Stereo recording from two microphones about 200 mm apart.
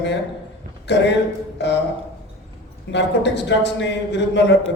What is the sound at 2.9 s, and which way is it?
A man's voice, 60° left (ahead or behind).